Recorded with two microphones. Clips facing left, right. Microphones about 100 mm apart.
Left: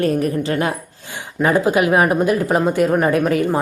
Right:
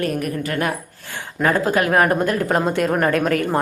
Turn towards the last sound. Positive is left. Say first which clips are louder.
# left 2 dB
turn(degrees=5)  # may be behind; listen again after turning